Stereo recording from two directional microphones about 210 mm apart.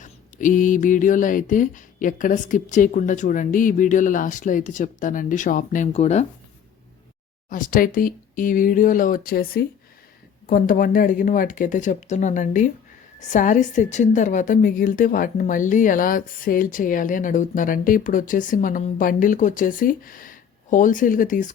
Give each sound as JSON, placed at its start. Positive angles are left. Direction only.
{"t": 0.0, "sound": "a woman's voice", "side_deg": 40}
{"t": 7.5, "sound": "a woman's voice", "side_deg": 40}